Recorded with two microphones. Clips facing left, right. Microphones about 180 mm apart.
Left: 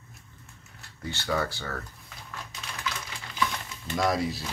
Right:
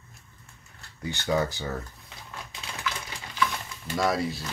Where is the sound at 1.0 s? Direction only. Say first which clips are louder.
Right 3 dB; 15° right (ahead or behind).